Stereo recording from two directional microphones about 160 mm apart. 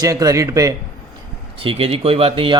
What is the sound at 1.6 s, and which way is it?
Speech, 35° right (ahead or behind).